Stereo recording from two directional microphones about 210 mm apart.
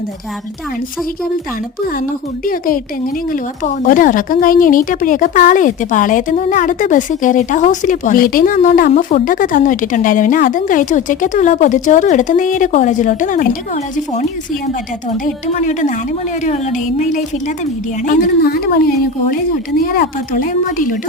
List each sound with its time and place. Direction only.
2.0 s a woman's voice: 40° left (ahead or behind)
19.8 s a woman's voice: 45° left (ahead or behind)